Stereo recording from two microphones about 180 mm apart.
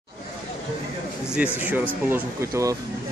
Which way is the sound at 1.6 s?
10° right (ahead or behind).